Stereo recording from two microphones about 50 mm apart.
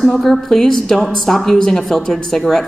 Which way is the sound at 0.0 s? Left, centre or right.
Centre.